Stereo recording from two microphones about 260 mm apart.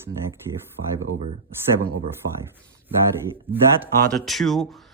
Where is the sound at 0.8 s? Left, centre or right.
Right.